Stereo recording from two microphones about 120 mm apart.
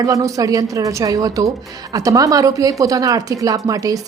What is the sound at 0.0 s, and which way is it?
A woman's voice, 30° right (ahead or behind).